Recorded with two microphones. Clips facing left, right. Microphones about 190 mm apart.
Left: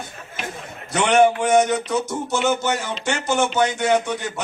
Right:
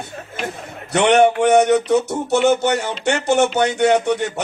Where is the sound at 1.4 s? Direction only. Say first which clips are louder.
Right 4 dB; 65° right (ahead or behind).